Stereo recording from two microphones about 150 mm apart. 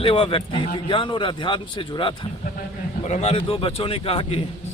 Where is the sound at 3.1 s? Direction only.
45° left (ahead or behind).